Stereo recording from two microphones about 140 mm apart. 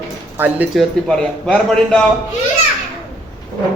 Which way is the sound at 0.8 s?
5° left (ahead or behind).